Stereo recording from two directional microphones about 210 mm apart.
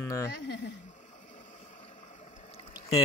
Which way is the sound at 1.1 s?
35° left (ahead or behind).